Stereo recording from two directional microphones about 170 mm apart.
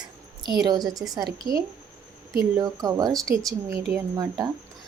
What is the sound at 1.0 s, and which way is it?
Speech, 10° right (ahead or behind).